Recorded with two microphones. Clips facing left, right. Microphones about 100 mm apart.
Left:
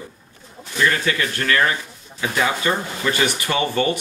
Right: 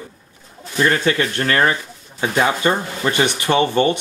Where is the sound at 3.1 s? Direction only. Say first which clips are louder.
Right 4 dB; 25° right (ahead or behind).